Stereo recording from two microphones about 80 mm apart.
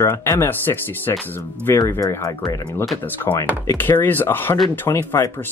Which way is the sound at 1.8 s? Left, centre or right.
Left.